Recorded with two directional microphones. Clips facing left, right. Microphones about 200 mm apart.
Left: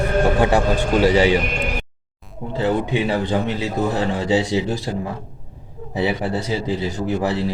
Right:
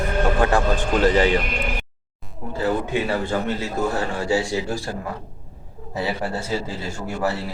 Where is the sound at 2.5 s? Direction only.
20° left (ahead or behind).